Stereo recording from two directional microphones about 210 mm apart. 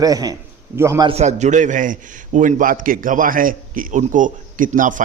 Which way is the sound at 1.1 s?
35° right (ahead or behind).